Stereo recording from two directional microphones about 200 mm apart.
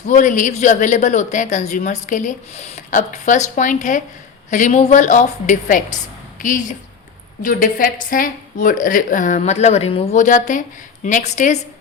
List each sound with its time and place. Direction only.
0.1 s speech: 40° left (ahead or behind)